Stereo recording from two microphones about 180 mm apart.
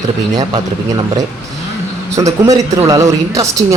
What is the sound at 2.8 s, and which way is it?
Speech, 20° right (ahead or behind).